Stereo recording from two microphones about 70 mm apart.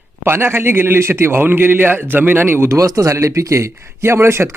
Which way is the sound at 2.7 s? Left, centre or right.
Right.